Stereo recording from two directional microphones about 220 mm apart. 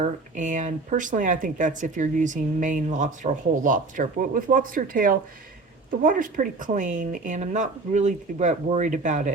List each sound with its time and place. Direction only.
0.0 s speech: 35° right (ahead or behind)